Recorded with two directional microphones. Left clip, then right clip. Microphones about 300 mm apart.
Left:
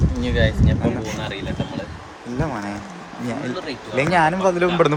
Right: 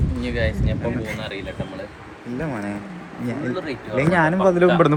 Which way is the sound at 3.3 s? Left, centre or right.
Centre.